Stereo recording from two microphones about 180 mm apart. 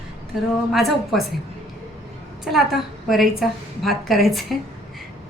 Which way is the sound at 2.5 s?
Centre (ahead or behind).